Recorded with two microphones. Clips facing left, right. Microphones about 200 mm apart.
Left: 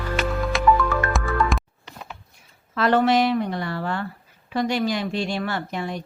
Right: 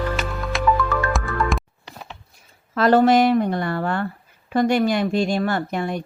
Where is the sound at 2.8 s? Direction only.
40° right (ahead or behind).